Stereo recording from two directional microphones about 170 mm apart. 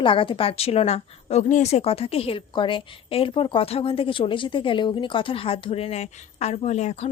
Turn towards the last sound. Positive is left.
turn(degrees=40)  # may be behind; listen again after turning